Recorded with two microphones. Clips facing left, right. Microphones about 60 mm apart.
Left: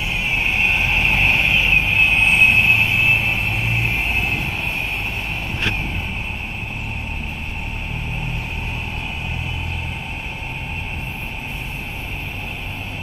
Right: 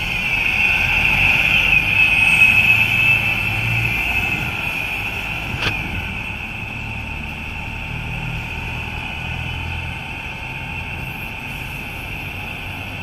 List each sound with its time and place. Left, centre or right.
0.2 s vehicle: right